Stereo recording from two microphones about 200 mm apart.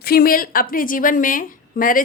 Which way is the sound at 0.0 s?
50° left (ahead or behind).